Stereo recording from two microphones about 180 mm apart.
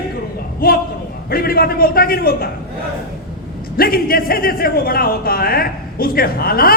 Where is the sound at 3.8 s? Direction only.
55° left (ahead or behind).